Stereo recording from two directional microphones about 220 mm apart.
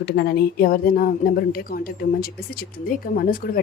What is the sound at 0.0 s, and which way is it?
A woman's voice, 45° left (ahead or behind).